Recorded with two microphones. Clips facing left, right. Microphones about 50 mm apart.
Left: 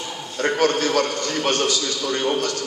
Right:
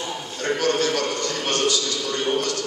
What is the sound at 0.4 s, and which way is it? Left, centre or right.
A man's voice, left.